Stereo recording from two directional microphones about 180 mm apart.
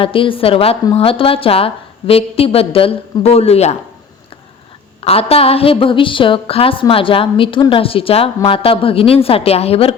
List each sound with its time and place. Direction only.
0.0 s a woman's voice: 30° left (ahead or behind)
5.0 s a woman's voice: 35° left (ahead or behind)